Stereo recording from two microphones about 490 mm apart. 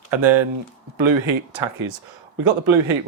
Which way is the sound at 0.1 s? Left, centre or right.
Right.